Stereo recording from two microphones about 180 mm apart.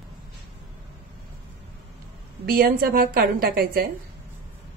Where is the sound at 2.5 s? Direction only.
55° right (ahead or behind).